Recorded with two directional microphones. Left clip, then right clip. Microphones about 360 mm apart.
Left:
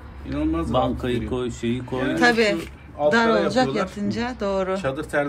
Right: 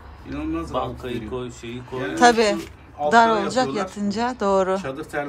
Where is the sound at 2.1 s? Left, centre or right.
Centre.